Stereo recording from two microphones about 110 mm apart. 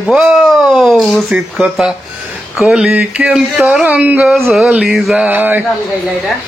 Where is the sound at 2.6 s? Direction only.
5° right (ahead or behind).